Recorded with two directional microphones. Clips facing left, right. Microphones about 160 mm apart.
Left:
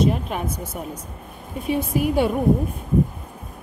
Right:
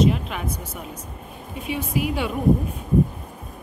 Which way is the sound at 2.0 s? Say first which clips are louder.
Left 4 dB; 45° left (ahead or behind).